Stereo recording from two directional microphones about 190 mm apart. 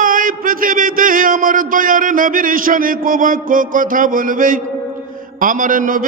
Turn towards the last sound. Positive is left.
turn(degrees=-45)  # may be behind; listen again after turning